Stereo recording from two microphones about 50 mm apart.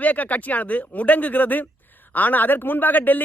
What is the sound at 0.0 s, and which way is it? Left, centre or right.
Speech, left.